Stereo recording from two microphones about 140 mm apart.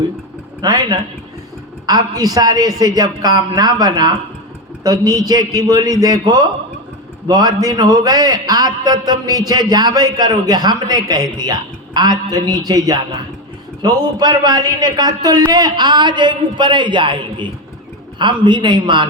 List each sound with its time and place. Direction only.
0.6 s a man's voice: 30° right (ahead or behind)